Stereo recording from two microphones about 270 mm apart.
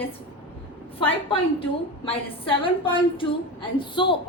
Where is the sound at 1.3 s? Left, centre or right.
Centre.